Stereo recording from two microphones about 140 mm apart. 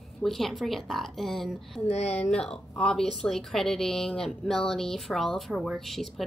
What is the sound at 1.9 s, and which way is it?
Speech, 50° left (ahead or behind).